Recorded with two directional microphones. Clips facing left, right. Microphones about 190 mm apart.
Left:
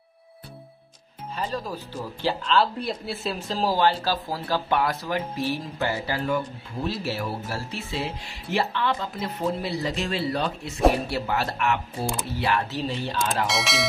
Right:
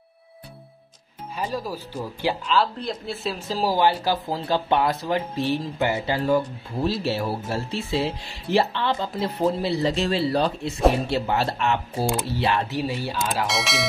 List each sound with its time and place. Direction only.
1.3 s speech: 10° right (ahead or behind)
2.5 s speech: 5° left (ahead or behind); by 12.6 s 25° right (ahead or behind)
12.7 s speech: 10° right (ahead or behind)